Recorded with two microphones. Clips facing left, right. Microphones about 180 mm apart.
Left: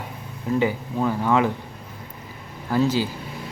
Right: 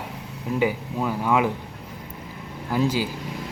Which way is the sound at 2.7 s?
10° right (ahead or behind).